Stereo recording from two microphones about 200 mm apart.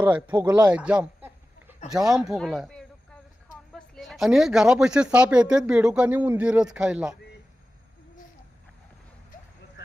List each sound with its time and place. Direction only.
0.0 s speech: 10° right (ahead or behind)
0.7 s a sound: 5° right (ahead or behind)
1.9 s speech: centre (ahead or behind)